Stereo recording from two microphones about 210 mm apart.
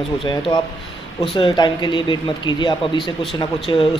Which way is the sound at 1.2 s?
25° left (ahead or behind).